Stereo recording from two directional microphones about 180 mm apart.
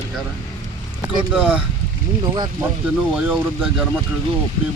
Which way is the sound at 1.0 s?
5° right (ahead or behind).